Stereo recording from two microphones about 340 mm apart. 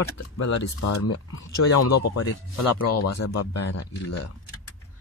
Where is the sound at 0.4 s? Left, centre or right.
Left.